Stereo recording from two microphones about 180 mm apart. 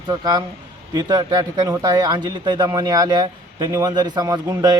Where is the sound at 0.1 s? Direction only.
20° right (ahead or behind).